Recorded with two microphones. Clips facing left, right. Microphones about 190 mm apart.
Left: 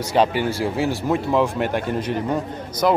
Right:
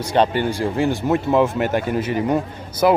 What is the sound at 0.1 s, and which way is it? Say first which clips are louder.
A man's voice: right 1 dB; 5° left (ahead or behind).